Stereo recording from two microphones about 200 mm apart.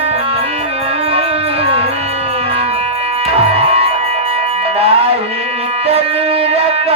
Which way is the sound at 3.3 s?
30° right (ahead or behind).